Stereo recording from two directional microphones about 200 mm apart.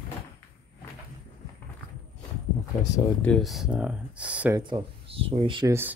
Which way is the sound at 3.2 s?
5° left (ahead or behind).